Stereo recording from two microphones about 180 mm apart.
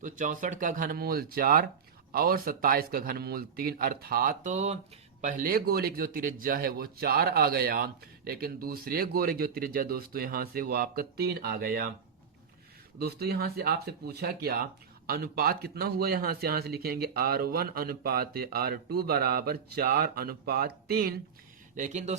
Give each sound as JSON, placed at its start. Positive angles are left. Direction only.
{"t": 0.0, "sound": "speech", "side_deg": -45}
{"t": 5.2, "sound": "speech", "side_deg": -50}
{"t": 13.0, "sound": "speech", "side_deg": -60}
{"t": 21.8, "sound": "speech", "side_deg": -40}